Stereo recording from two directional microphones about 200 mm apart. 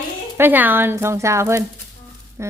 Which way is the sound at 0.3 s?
10° right (ahead or behind).